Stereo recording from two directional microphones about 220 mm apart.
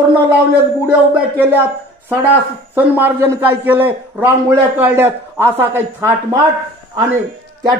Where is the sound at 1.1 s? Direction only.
10° right (ahead or behind).